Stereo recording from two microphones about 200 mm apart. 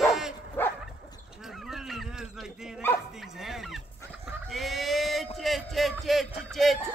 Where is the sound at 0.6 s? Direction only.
10° left (ahead or behind).